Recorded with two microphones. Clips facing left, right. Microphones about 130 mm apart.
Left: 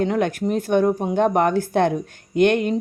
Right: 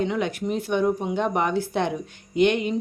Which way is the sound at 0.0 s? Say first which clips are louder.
Left 4 dB; 45° left (ahead or behind).